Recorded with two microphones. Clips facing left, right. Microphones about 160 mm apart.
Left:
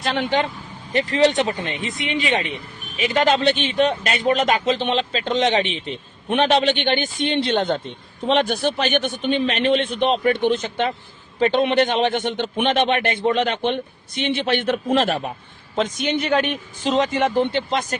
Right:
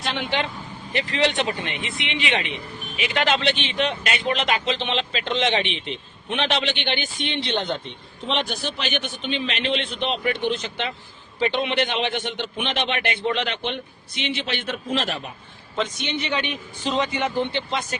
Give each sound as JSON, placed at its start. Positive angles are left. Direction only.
{"t": 0.1, "sound": "speech", "side_deg": 40}